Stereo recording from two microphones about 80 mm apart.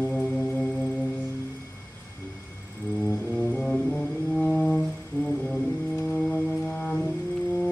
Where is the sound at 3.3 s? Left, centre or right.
Centre.